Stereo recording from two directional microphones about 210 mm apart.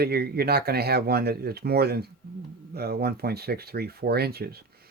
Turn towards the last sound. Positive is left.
turn(degrees=-50)  # may be behind; listen again after turning